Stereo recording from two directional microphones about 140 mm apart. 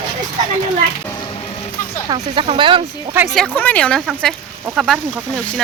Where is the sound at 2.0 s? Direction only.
35° right (ahead or behind).